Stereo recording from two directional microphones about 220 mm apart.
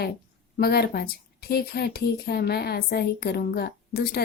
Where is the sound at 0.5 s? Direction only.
45° left (ahead or behind).